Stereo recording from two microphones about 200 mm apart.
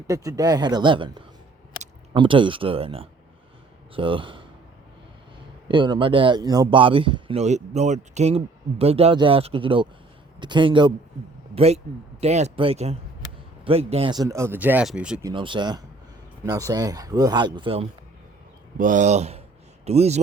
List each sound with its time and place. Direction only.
0.1 s speech: 15° right (ahead or behind)
5.6 s speech: 25° right (ahead or behind); by 15.2 s 5° right (ahead or behind)
15.2 s speech: 25° right (ahead or behind)
18.8 s speech: 40° right (ahead or behind)